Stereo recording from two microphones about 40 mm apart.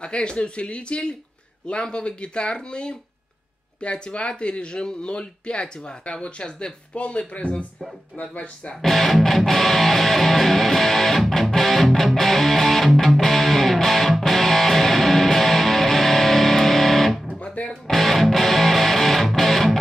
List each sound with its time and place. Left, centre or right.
0.0 s speech: left
8.8 s music: centre